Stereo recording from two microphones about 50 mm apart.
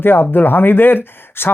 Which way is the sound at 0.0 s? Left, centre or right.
Left.